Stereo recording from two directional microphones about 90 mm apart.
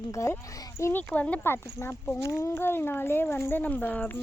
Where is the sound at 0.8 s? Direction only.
20° left (ahead or behind).